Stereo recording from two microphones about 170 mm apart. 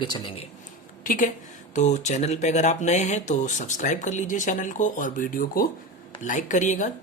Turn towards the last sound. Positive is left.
turn(degrees=45)  # may be behind; listen again after turning